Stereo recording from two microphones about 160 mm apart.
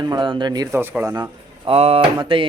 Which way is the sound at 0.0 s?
25° right (ahead or behind).